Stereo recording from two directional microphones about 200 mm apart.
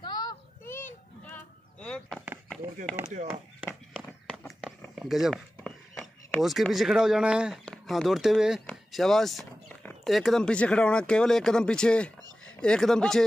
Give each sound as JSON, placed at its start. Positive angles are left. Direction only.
{"t": 0.0, "sound": "a sound", "side_deg": 20}
{"t": 3.6, "sound": "run", "side_deg": 5}
{"t": 8.6, "sound": "speech", "side_deg": 0}